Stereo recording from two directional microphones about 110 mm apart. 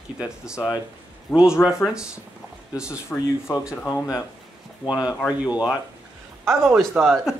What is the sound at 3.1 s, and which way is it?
Speech, 15° left (ahead or behind).